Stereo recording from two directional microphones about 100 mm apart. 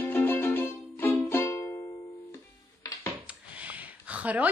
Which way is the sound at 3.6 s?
15° right (ahead or behind).